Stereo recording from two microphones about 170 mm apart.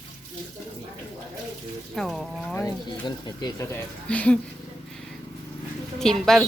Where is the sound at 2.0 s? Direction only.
Centre (ahead or behind).